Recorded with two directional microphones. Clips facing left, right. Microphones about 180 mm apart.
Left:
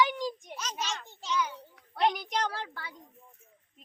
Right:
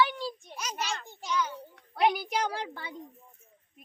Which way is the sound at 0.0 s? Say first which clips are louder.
Even; 15° left (ahead or behind).